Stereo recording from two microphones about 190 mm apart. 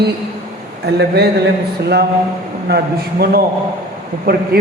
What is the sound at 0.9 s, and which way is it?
Speech, 60° right (ahead or behind).